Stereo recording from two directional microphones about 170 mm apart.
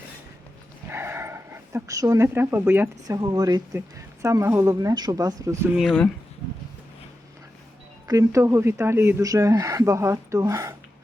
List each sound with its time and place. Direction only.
0.9 s speech: 15° right (ahead or behind)
5.7 s speech: centre (ahead or behind)
8.0 s speech: 20° right (ahead or behind)